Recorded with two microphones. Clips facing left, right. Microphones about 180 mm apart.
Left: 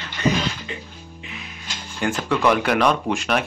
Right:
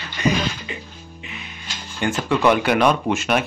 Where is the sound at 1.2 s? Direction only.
Centre (ahead or behind).